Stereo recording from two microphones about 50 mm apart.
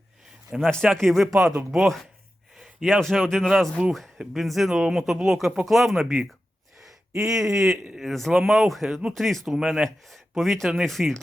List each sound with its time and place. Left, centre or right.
0.6 s speech: centre
1.7 s a man's voice: centre
3.8 s speech: right
4.4 s speech: centre
7.2 s speech: centre